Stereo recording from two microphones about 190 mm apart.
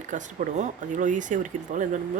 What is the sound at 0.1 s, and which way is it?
Speech, 40° right (ahead or behind).